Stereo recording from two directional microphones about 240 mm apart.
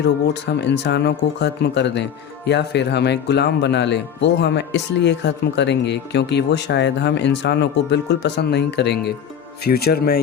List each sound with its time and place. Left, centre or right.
0.6 s a man's voice: left